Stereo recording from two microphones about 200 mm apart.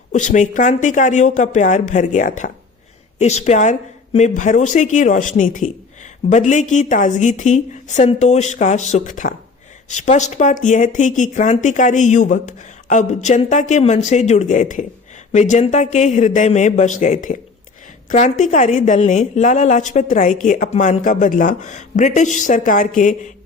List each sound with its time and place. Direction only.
0.1 s a woman's voice: 40° left (ahead or behind)